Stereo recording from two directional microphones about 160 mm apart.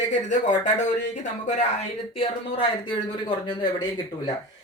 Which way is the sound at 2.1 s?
30° left (ahead or behind).